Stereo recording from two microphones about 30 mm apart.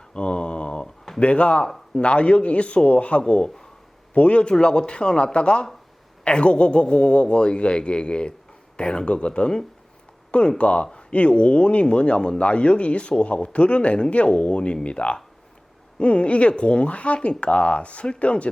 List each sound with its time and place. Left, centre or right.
0.1 s a sound: left
1.2 s a man's voice: left
4.1 s speech: left
4.5 s a man's voice: left
10.6 s a man's voice: left